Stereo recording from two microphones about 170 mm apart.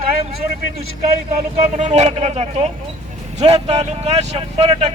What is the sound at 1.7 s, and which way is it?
A man's voice, 40° right (ahead or behind).